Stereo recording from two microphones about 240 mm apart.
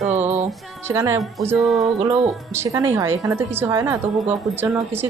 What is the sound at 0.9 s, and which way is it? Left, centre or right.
Speech, centre.